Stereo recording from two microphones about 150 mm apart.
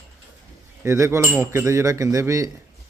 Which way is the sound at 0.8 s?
15° right (ahead or behind).